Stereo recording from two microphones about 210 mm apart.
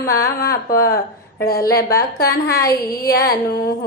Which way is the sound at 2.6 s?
15° left (ahead or behind).